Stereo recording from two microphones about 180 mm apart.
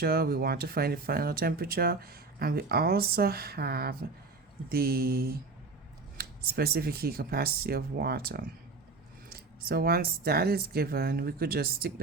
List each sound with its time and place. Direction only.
0.0 s speech: 55° right (ahead or behind)